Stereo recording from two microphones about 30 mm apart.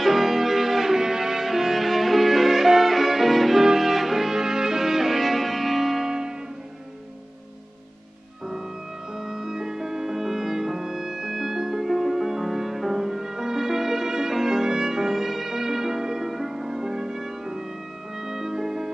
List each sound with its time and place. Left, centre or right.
0.0 s music: centre
2.9 s violin: centre
4.4 s music: centre
6.0 s music: right
9.2 s music: centre
14.3 s violin: centre
16.3 s music: centre